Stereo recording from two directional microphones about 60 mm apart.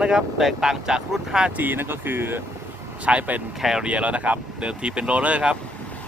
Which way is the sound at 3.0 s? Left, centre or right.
Right.